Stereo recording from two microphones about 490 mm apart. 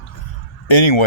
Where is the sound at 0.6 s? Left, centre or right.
Left.